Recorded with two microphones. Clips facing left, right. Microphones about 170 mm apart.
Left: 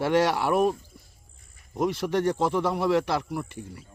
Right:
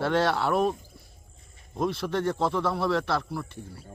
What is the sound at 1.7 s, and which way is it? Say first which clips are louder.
Speech: left 2 dB; 15° left (ahead or behind).